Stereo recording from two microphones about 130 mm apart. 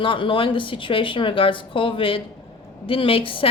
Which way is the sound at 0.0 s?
40° left (ahead or behind).